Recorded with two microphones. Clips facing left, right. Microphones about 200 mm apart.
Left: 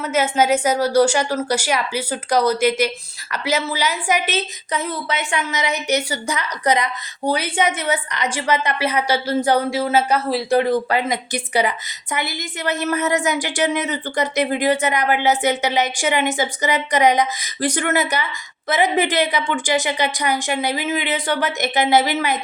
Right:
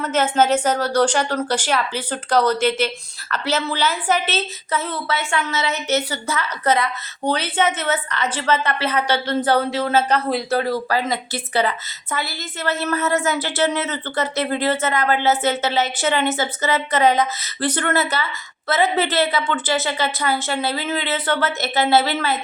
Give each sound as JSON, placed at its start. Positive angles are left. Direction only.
{"t": 0.0, "sound": "a woman's voice", "side_deg": 10}
{"t": 10.5, "sound": "a woman's voice", "side_deg": 20}